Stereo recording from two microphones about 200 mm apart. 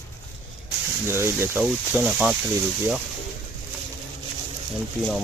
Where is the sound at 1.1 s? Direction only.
10° right (ahead or behind).